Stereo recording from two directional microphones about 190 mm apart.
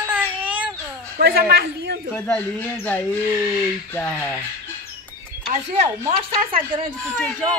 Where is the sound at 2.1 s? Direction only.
10° left (ahead or behind).